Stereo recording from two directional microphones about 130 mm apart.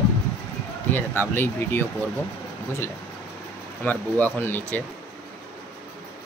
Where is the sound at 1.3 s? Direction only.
15° left (ahead or behind).